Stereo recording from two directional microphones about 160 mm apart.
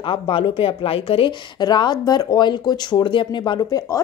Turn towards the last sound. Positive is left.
turn(degrees=25)  # may be behind; listen again after turning